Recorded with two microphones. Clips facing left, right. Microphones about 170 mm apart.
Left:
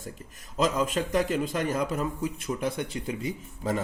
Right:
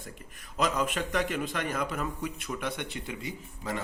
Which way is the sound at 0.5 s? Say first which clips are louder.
Left 3 dB; 25° left (ahead or behind).